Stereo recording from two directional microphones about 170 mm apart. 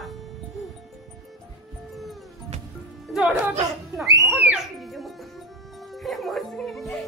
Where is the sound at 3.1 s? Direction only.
5° right (ahead or behind).